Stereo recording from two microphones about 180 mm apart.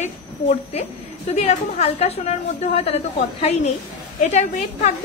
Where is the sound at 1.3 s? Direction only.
35° left (ahead or behind).